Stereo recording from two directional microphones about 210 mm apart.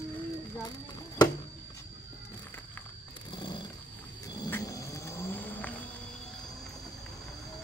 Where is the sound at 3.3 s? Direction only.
20° left (ahead or behind).